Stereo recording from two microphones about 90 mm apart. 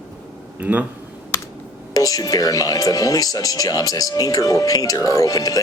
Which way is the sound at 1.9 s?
40° left (ahead or behind).